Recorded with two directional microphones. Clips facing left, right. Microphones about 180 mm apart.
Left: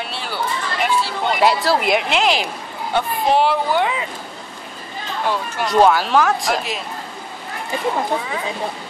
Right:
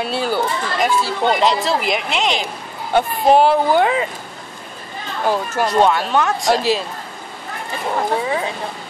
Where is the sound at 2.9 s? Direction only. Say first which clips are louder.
Right 4 dB; 45° right (ahead or behind).